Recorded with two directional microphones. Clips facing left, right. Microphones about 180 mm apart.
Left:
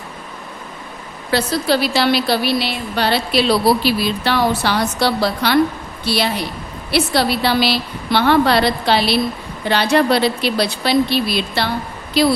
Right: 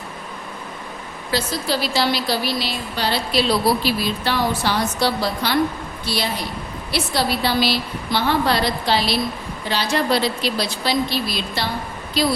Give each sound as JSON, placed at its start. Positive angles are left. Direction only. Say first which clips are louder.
{"t": 1.3, "sound": "a woman's voice", "louder": "left 6 dB", "side_deg": 65}